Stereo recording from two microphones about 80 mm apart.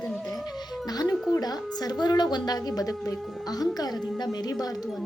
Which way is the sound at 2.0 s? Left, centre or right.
Left.